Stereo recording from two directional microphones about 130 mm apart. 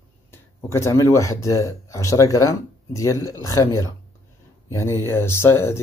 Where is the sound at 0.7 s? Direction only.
25° left (ahead or behind).